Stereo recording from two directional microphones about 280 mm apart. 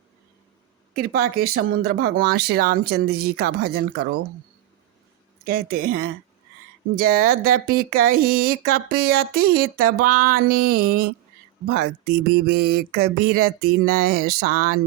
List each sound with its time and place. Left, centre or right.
0.9 s speech: right
5.5 s speech: right